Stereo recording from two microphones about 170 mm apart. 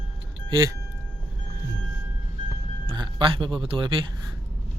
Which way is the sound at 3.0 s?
30° right (ahead or behind).